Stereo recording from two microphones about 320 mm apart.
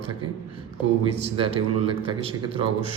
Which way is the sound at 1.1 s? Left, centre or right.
Centre.